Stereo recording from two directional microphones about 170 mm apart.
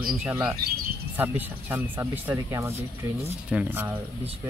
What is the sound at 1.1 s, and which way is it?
Speech, 10° right (ahead or behind).